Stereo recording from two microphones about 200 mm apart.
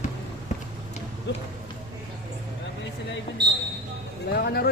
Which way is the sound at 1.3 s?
60° left (ahead or behind).